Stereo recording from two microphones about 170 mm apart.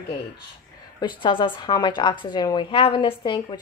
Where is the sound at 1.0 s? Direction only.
30° left (ahead or behind).